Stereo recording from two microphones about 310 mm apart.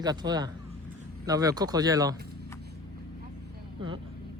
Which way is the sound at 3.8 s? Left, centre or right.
Centre.